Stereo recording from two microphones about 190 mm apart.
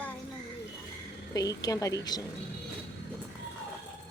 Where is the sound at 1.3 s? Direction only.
20° left (ahead or behind).